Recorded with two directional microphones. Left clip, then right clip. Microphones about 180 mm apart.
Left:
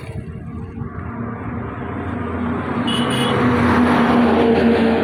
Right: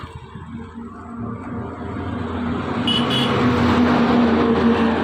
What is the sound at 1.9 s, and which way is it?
Vehicle, 15° left (ahead or behind).